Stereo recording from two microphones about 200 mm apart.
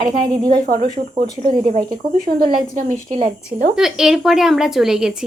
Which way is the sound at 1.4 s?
25° right (ahead or behind).